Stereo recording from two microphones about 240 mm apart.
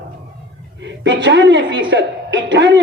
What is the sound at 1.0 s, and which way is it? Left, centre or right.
A man's voice, right.